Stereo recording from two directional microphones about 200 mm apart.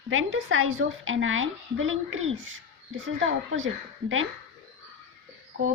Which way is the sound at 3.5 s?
80° right.